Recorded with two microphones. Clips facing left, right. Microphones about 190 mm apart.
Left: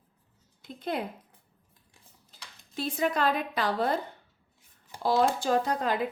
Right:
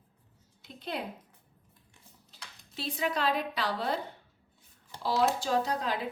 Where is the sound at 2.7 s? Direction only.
50° left (ahead or behind).